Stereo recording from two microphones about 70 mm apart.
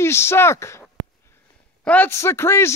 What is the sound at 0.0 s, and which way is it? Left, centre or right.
Speech, left.